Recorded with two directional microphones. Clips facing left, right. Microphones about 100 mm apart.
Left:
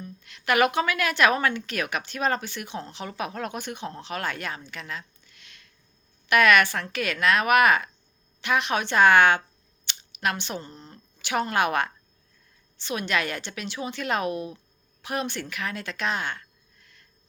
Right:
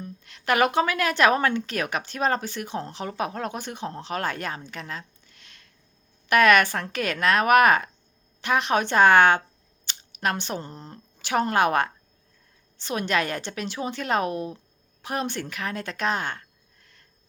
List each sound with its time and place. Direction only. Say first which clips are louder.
0.0 s a woman's voice: right 1 dB; 35° right (ahead or behind)